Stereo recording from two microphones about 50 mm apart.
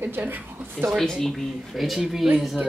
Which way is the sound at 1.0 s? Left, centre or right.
Centre.